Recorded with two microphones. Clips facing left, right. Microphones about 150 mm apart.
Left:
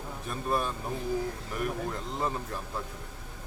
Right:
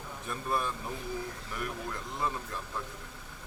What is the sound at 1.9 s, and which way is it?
Speech, 35° left (ahead or behind).